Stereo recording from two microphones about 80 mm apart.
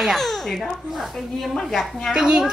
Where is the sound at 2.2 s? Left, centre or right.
Centre.